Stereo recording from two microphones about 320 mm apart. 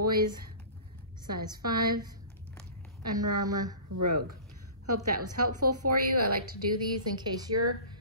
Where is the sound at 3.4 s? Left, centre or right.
Centre.